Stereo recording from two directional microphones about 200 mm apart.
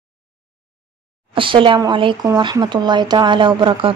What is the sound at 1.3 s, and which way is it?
Speech, 25° right (ahead or behind).